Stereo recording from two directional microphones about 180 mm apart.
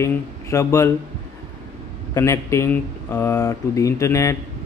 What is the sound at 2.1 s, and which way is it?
Speech, 15° left (ahead or behind).